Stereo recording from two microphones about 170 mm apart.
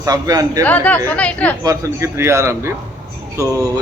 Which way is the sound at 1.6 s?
15° right (ahead or behind).